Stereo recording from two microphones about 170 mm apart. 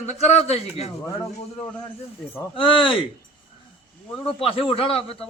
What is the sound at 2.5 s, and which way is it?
Speech, 30° left (ahead or behind).